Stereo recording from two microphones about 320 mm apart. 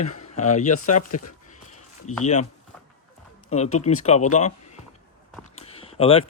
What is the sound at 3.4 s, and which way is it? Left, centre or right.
Speech, left.